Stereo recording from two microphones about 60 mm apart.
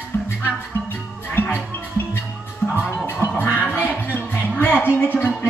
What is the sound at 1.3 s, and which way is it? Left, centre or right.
Music, left.